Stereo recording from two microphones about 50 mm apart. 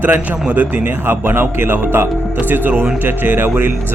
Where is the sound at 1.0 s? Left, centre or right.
Right.